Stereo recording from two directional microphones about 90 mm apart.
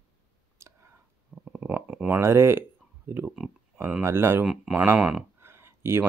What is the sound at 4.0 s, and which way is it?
Speech, 30° right (ahead or behind).